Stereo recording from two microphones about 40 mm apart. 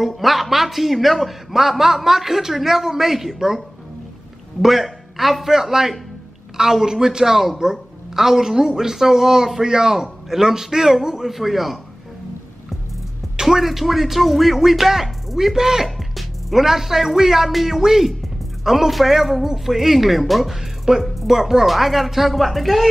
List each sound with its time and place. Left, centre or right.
0.0 s speech: centre
13.4 s music: centre
13.7 s speech: centre
16.0 s speech: centre